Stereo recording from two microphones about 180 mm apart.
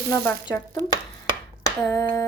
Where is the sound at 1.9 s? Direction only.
20° left (ahead or behind).